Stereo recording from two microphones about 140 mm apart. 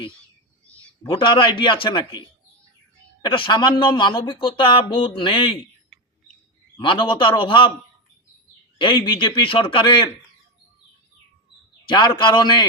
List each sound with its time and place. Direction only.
1.0 s speech: 35° left (ahead or behind)
6.7 s speech: 35° left (ahead or behind)
8.8 s speech: 35° left (ahead or behind)
11.9 s speech: 30° left (ahead or behind)